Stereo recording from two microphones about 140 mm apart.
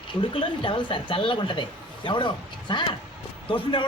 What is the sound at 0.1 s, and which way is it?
A man's voice, 35° left (ahead or behind).